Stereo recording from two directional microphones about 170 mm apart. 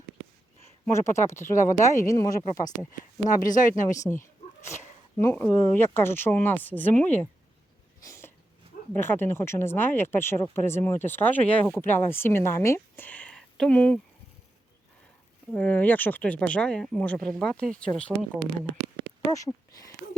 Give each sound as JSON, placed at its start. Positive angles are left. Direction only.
{"t": 0.9, "sound": "speech", "side_deg": 15}
{"t": 3.2, "sound": "speech", "side_deg": 50}
{"t": 3.8, "sound": "speech", "side_deg": 20}
{"t": 8.0, "sound": "a sound", "side_deg": 15}
{"t": 8.9, "sound": "speech", "side_deg": 10}
{"t": 15.5, "sound": "speech", "side_deg": 10}
{"t": 19.3, "sound": "speech", "side_deg": 20}